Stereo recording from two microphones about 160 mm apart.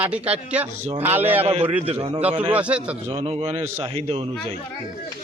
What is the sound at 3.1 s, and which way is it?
Speech, 35° right (ahead or behind).